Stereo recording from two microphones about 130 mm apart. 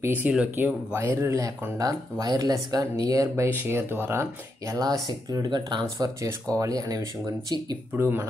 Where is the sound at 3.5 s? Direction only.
15° right (ahead or behind).